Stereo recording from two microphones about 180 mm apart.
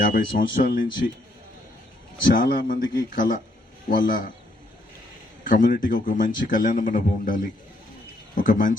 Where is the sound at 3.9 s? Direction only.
50° left (ahead or behind).